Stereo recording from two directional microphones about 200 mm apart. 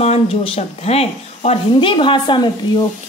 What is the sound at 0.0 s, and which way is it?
Speech, 30° left (ahead or behind).